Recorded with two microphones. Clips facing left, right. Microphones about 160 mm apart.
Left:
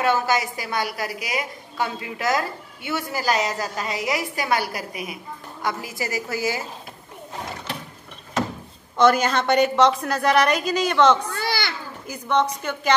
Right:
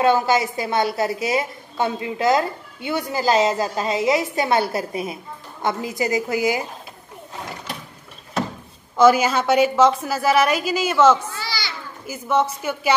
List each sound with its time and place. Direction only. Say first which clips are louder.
0.0 s a woman's voice: right 4 dB; 20° right (ahead or behind)
8.9 s a woman's voice: right 3 dB; 5° right (ahead or behind)
11.2 s children playing: left 4 dB; 55° left (ahead or behind)
12.1 s a woman's voice: right 1 dB; 5° right (ahead or behind)